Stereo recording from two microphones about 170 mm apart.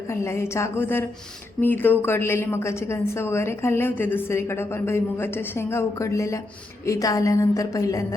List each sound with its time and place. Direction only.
0.1 s a woman's voice: 15° left (ahead or behind)